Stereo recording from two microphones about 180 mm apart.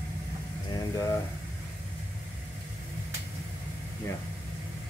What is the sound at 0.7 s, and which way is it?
Speech, 20° left (ahead or behind).